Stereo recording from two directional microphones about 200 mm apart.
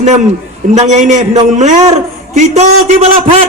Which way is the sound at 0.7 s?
35° right (ahead or behind).